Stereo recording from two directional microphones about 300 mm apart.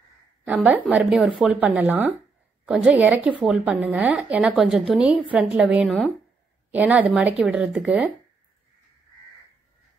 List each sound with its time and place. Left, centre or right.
0.5 s a woman's voice: centre